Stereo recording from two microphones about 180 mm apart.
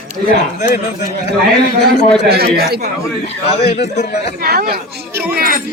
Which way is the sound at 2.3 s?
60° right (ahead or behind).